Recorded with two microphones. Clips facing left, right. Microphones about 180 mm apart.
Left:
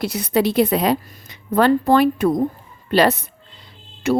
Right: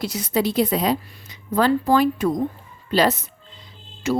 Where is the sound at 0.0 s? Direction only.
60° left (ahead or behind).